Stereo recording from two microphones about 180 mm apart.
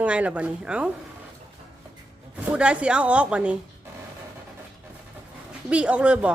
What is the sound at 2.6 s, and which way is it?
Speech, 5° right (ahead or behind).